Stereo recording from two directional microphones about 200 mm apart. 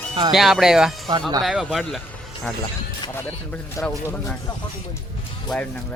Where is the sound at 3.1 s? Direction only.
10° left (ahead or behind).